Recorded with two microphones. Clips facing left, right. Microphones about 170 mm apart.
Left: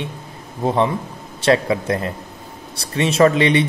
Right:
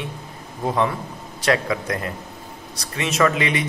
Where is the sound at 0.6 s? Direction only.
25° left (ahead or behind).